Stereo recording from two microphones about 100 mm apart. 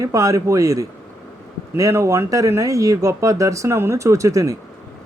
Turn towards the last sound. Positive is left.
turn(degrees=-35)  # may be behind; listen again after turning